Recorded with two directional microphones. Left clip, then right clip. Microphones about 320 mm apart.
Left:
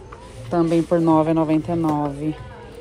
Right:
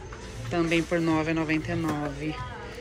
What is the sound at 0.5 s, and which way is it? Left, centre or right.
Speech, centre.